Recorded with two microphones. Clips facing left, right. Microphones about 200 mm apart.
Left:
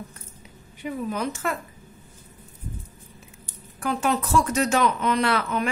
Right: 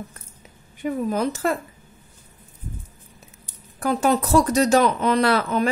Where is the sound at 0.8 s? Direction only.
35° right (ahead or behind).